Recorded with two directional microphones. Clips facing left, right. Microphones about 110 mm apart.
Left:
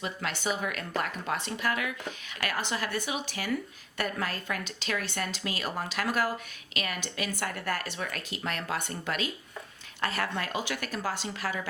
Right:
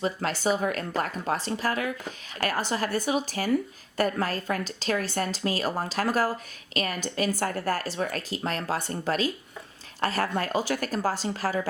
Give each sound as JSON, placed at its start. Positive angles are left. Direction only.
{"t": 0.0, "sound": "a woman's voice", "side_deg": -35}